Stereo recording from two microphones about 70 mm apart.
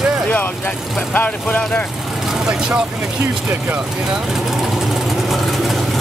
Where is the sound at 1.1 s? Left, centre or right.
Left.